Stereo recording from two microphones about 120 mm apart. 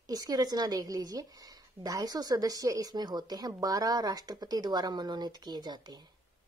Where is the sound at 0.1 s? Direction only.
30° right (ahead or behind).